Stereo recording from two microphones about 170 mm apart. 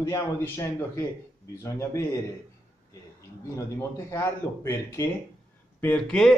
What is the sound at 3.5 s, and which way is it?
A man's voice, 15° left (ahead or behind).